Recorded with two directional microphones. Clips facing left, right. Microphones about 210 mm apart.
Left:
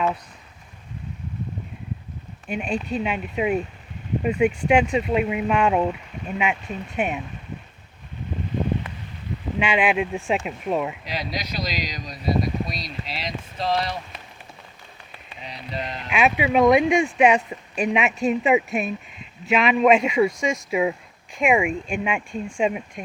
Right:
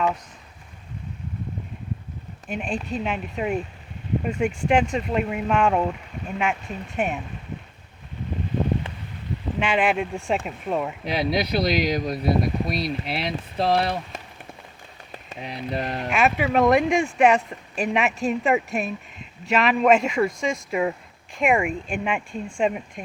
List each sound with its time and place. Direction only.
2.5 s speech: centre (ahead or behind)
9.6 s speech: centre (ahead or behind)
11.0 s speech: 60° right (ahead or behind)
15.3 s speech: 55° right (ahead or behind)
16.1 s speech: centre (ahead or behind)